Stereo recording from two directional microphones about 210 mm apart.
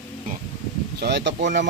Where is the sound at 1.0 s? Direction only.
55° right (ahead or behind).